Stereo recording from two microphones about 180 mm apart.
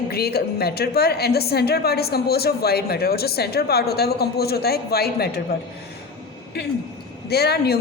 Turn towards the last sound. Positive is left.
turn(degrees=60)  # may be behind; listen again after turning